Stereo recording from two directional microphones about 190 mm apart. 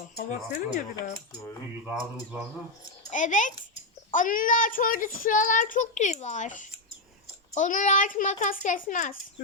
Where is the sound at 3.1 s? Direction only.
40° left (ahead or behind).